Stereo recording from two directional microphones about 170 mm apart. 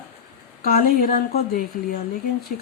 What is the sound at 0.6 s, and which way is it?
Speech, 60° left (ahead or behind).